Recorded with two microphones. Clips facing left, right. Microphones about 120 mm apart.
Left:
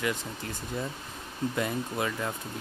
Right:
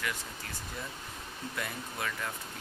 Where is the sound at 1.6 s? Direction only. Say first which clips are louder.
Left 7 dB; 25° left (ahead or behind).